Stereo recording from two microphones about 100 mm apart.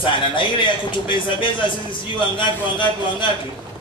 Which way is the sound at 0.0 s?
55° left (ahead or behind).